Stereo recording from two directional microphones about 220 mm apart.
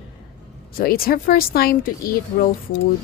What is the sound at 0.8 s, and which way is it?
A woman's voice, 40° left (ahead or behind).